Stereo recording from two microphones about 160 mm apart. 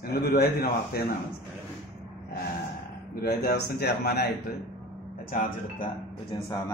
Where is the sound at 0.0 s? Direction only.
75° left (ahead or behind).